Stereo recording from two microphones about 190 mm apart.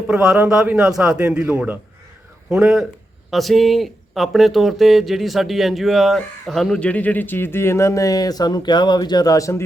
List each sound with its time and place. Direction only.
0.1 s speech: 5° right (ahead or behind); by 9.6 s 15° left (ahead or behind)